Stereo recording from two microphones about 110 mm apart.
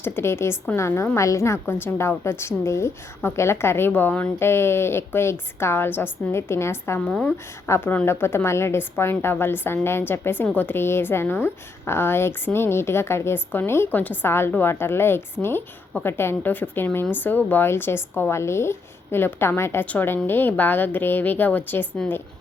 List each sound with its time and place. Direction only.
0.0 s a woman's voice: 20° left (ahead or behind)
7.0 s a woman's voice: 5° left (ahead or behind)
7.7 s a woman's voice: 20° left (ahead or behind)